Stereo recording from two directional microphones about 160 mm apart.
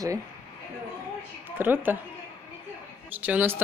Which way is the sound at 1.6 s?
10° right (ahead or behind).